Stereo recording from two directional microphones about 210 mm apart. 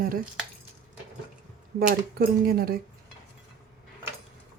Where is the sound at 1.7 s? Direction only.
45° right (ahead or behind).